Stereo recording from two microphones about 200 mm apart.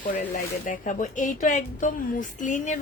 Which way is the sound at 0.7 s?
40° left (ahead or behind).